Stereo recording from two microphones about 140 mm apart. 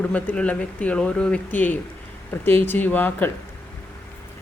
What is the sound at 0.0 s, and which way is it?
Speech, 10° left (ahead or behind).